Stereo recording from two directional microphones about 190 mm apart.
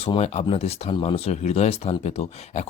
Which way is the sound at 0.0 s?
30° left (ahead or behind).